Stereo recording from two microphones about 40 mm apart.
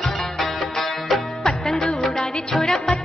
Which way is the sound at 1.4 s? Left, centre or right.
Centre.